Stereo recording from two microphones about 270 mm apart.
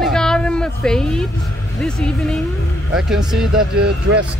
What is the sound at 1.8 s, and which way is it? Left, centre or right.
Speech, centre.